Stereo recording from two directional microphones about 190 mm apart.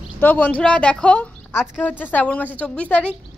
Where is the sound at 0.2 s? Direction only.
10° left (ahead or behind).